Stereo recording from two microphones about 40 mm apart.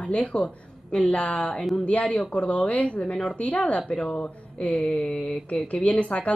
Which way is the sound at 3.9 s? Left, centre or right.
Centre.